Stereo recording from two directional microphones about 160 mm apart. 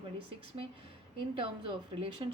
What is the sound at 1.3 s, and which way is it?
Speech, 35° right (ahead or behind).